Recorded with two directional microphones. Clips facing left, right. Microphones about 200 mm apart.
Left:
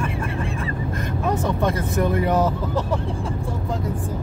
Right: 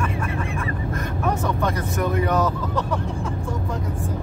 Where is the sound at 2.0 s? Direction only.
25° left (ahead or behind).